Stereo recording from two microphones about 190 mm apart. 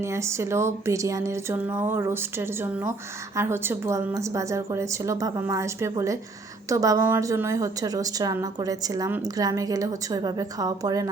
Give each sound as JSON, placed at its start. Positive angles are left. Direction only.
{"t": 0.0, "sound": "a woman's voice", "side_deg": -15}